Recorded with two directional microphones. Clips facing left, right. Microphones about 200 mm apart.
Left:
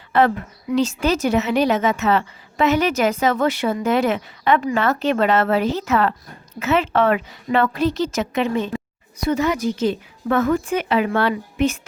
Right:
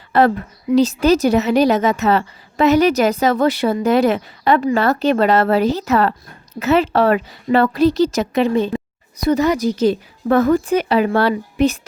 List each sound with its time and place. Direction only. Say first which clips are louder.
0.1 s a woman's voice: right 3 dB; 40° right (ahead or behind)